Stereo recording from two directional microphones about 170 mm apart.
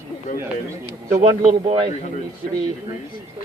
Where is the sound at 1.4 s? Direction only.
45° right (ahead or behind).